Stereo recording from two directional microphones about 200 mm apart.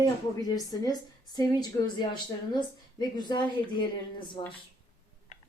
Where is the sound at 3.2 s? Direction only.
20° left (ahead or behind).